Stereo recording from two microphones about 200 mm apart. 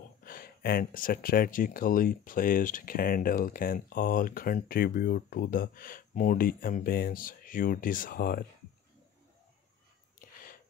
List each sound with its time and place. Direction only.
0.2 s speech: 45° left (ahead or behind)
10.1 s whispering: 45° left (ahead or behind)